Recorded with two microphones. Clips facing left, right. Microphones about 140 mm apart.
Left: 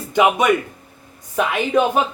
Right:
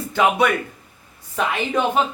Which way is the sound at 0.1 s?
20° left (ahead or behind).